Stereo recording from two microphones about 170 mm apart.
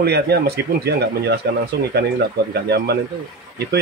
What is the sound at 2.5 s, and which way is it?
Speech, 70° right (ahead or behind).